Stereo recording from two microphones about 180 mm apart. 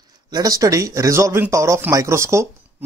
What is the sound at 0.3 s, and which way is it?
Speech, 20° right (ahead or behind).